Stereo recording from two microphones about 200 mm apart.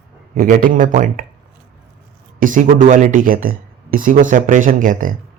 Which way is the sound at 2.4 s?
40° right (ahead or behind).